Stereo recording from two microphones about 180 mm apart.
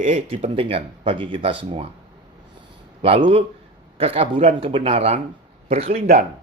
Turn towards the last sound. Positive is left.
turn(degrees=-60)  # may be behind; listen again after turning